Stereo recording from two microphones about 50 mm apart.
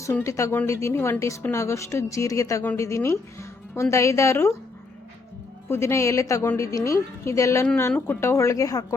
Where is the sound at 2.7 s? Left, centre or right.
Left.